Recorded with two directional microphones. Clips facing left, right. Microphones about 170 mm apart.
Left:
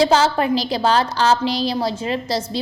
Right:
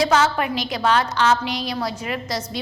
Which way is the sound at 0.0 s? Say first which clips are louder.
Left 3 dB; 30° left (ahead or behind).